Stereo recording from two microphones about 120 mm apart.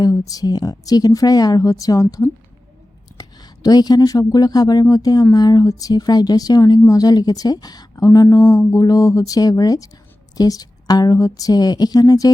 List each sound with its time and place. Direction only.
0.0 s speech: 30° left (ahead or behind)